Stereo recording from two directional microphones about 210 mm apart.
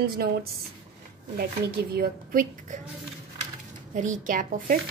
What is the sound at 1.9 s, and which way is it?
Speech, 45° right (ahead or behind).